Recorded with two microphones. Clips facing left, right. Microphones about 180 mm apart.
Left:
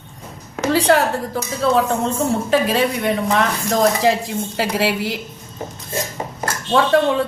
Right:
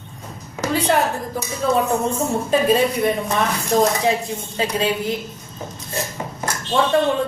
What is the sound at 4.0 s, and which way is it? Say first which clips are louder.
A woman's voice: left 3 dB; 90° left.